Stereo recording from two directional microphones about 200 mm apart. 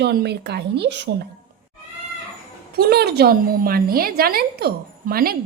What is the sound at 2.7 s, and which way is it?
A woman's voice, 50° right (ahead or behind).